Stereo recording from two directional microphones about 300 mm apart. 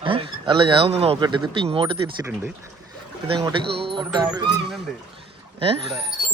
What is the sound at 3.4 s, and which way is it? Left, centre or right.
A man's voice, centre.